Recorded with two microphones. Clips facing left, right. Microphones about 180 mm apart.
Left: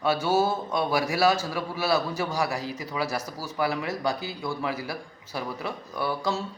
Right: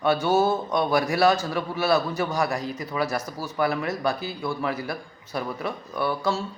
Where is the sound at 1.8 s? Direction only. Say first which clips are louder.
Right 3 dB; 55° right (ahead or behind).